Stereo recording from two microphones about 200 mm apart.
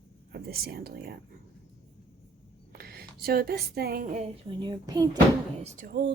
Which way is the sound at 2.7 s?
50° right (ahead or behind).